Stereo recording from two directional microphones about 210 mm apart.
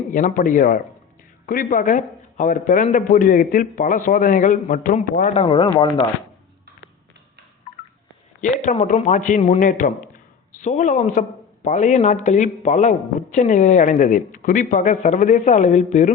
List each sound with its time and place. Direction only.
0.1 s a man's voice: 40° left (ahead or behind); by 5.7 s 25° left (ahead or behind)
8.4 s a man's voice: 35° left (ahead or behind)